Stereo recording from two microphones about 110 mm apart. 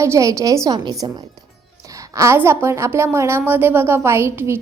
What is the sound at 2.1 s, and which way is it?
A woman's voice, 30° right (ahead or behind).